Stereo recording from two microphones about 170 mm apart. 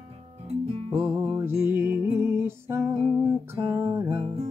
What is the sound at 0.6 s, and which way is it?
Music, 40° right (ahead or behind).